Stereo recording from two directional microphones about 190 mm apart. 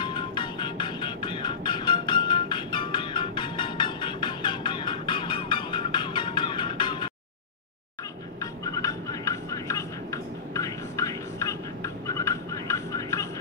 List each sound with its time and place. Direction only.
0.0 s music: 25° left (ahead or behind)
8.4 s vehicle: 20° left (ahead or behind)